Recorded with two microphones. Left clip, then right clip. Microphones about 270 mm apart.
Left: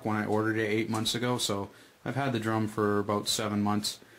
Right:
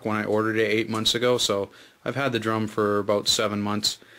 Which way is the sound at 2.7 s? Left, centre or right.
Centre.